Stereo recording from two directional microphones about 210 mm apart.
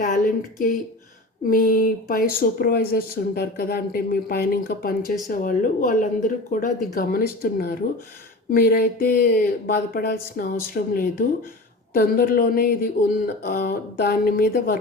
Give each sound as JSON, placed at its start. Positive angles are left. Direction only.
{"t": 1.5, "sound": "speech", "side_deg": 40}